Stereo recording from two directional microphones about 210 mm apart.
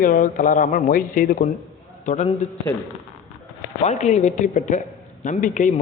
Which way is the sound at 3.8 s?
35° left (ahead or behind).